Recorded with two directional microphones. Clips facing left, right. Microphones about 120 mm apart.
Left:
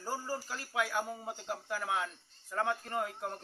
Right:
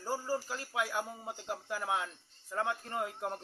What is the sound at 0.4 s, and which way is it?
Speech, 20° right (ahead or behind).